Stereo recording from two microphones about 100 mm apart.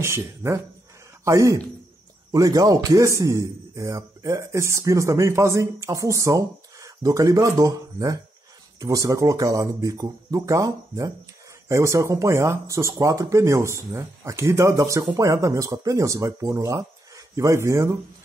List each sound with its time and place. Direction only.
0.0 s speech: 25° right (ahead or behind)